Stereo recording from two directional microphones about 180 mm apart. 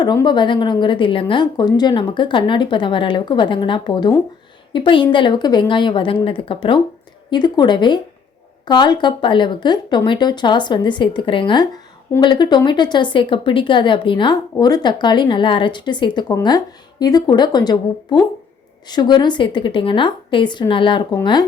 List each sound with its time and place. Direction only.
0.0 s a woman's voice: 20° left (ahead or behind)